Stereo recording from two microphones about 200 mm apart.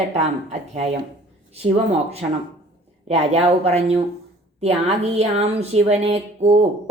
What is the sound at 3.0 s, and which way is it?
A woman's voice, 35° right (ahead or behind).